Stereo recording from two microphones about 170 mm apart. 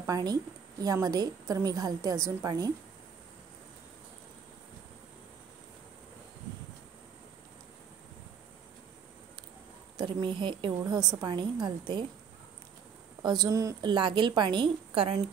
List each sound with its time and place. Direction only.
0.0 s a woman's voice: 20° right (ahead or behind)
9.9 s a woman's voice: 30° right (ahead or behind)
13.2 s a woman's voice: 25° right (ahead or behind)